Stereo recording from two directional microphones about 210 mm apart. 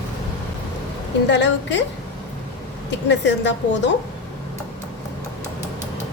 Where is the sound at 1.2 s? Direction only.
55° left (ahead or behind).